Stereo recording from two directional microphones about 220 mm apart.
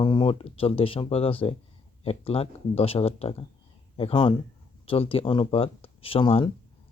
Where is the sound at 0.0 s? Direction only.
20° left (ahead or behind).